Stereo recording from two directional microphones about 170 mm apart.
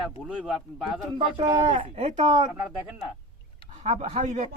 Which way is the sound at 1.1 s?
25° right (ahead or behind).